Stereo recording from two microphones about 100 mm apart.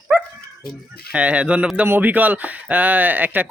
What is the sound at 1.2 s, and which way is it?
Speech, 10° right (ahead or behind).